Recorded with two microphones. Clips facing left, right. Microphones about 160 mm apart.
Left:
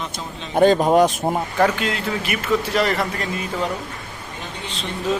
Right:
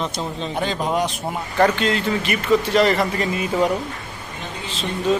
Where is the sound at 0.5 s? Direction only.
45° left (ahead or behind).